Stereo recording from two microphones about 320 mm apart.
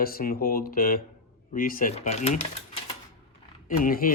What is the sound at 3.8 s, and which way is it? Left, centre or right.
Speech, left.